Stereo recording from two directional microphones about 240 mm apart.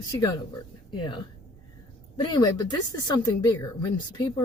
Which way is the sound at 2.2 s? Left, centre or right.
Centre.